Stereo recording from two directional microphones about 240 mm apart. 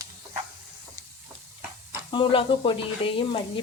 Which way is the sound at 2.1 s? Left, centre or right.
Left.